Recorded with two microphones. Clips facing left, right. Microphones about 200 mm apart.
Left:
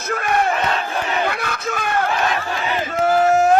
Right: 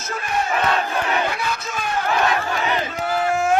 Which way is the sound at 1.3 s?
60° left (ahead or behind).